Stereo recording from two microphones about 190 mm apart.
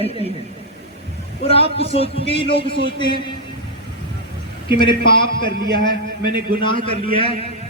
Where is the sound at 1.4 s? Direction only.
30° left (ahead or behind).